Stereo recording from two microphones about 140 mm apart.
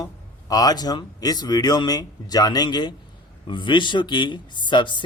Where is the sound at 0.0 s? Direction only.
25° left (ahead or behind).